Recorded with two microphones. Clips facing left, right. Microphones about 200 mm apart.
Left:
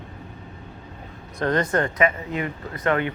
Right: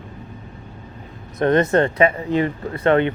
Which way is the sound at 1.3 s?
25° right (ahead or behind).